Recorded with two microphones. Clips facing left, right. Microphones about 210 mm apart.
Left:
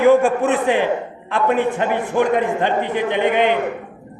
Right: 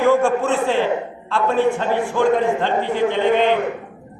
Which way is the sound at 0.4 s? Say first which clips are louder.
Left 1 dB; 20° left (ahead or behind).